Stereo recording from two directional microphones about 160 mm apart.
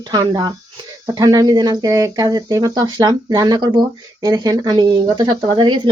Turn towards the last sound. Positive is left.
turn(degrees=-30)  # may be behind; listen again after turning